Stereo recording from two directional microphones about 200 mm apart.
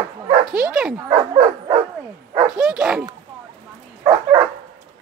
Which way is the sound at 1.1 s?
30° right (ahead or behind).